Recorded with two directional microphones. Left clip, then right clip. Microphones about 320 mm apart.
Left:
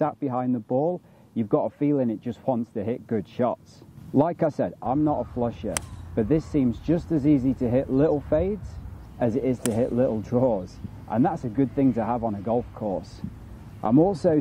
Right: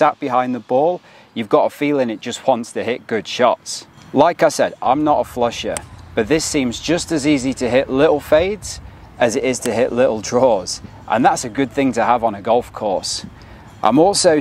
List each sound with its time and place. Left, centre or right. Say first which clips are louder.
0.0 s speech: right 11 dB; centre
5.0 s speech: right 10 dB; right
5.4 s speech: right 9 dB; centre; by 13.0 s right
14.1 s speech: right 9 dB; centre